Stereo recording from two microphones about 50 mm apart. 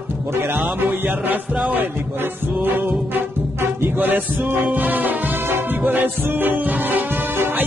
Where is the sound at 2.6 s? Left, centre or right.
Right.